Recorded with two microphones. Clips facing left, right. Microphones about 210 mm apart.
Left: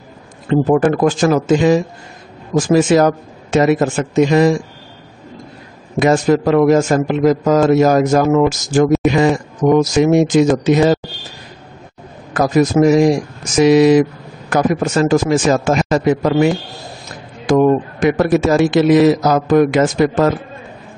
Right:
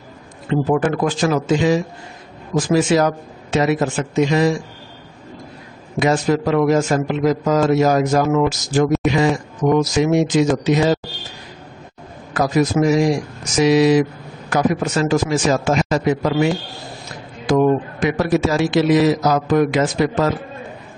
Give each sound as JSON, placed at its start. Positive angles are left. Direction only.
{"t": 0.5, "sound": "a man's voice", "side_deg": 45}
{"t": 5.9, "sound": "a man's voice", "side_deg": 50}
{"t": 9.0, "sound": "speech", "side_deg": 0}
{"t": 9.6, "sound": "a man's voice", "side_deg": 50}
{"t": 12.4, "sound": "a man's voice", "side_deg": 50}
{"t": 18.0, "sound": "a man's voice", "side_deg": 50}